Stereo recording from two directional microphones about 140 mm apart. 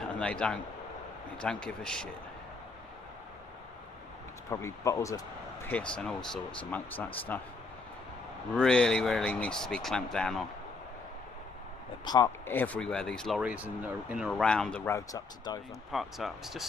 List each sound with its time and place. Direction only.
0.2 s speech: 5° left (ahead or behind)
4.5 s speech: 20° left (ahead or behind)
5.7 s speech: 10° left (ahead or behind)
8.5 s speech: 5° left (ahead or behind)
12.0 s speech: 30° left (ahead or behind)
12.3 s speech: 15° left (ahead or behind)
13.4 s speech: 10° right (ahead or behind)
14.9 s speech: 25° left (ahead or behind)
15.9 s speech: centre (ahead or behind)